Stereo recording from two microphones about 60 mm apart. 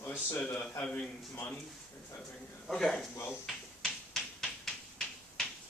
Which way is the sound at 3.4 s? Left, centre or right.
Centre.